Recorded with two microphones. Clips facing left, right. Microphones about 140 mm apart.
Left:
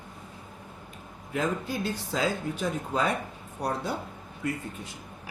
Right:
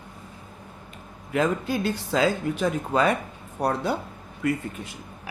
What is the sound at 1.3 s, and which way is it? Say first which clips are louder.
Speech: right 5 dB; 80° right.